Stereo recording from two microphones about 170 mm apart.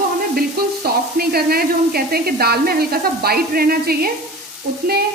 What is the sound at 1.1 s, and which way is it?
Speech, 60° right (ahead or behind).